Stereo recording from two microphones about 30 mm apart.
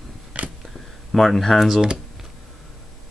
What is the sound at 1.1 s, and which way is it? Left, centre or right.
Speech, centre.